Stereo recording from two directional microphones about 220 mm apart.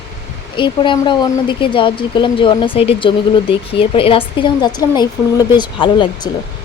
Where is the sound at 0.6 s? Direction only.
20° left (ahead or behind).